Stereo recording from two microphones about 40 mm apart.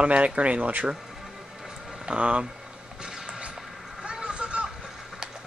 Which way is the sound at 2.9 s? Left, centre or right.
Right.